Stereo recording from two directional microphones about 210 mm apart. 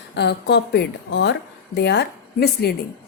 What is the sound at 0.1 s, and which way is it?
A woman's voice, 55° left (ahead or behind).